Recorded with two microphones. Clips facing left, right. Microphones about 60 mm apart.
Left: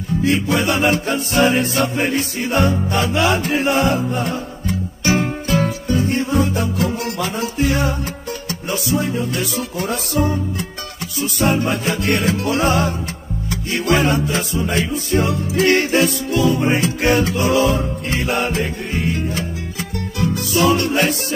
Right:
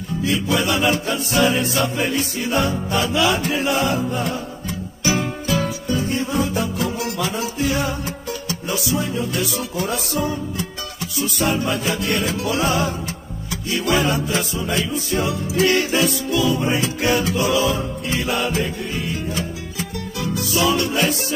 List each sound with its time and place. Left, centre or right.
0.2 s music: left